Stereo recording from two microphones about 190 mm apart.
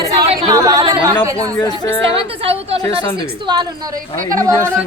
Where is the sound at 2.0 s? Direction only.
30° right (ahead or behind).